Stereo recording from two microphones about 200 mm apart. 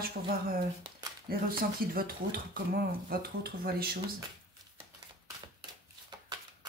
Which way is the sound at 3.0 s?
50° right (ahead or behind).